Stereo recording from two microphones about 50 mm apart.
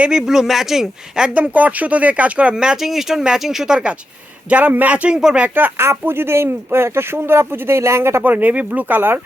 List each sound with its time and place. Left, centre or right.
0.1 s speech: centre
1.3 s speech: right
2.8 s speech: centre
4.4 s speech: right
5.1 s speech: centre
5.7 s speech: right
8.2 s speech: right
9.0 s speech: right